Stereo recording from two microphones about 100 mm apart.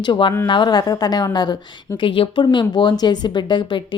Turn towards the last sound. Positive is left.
turn(degrees=50)  # may be behind; listen again after turning